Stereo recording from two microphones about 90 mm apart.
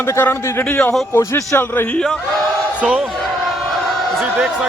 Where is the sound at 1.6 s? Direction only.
20° left (ahead or behind).